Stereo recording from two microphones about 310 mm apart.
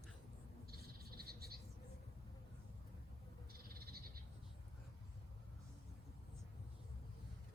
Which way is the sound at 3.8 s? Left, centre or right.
Right.